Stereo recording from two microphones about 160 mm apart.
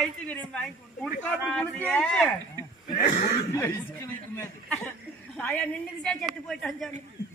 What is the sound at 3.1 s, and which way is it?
Speech, 50° left (ahead or behind).